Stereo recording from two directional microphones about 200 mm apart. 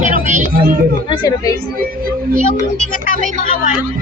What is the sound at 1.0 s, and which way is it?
Speech, 20° left (ahead or behind).